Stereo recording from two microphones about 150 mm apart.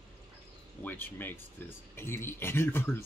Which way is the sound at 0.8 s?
10° left (ahead or behind).